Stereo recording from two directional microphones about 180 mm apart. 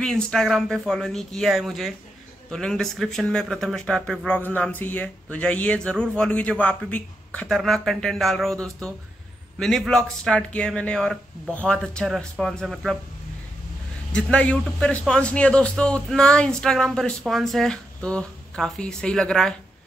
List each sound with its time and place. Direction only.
0.0 s speech: 5° left (ahead or behind)
14.1 s speech: 5° left (ahead or behind)